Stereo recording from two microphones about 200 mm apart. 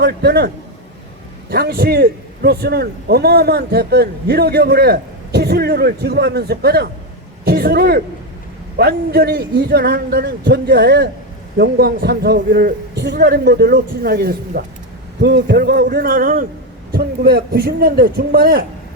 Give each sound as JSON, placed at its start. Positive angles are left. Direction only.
{"t": 0.0, "sound": "a man's voice", "side_deg": -55}
{"t": 15.2, "sound": "a man's voice", "side_deg": -60}